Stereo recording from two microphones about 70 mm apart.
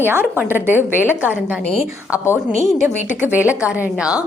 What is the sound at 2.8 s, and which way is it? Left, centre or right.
A woman's voice, right.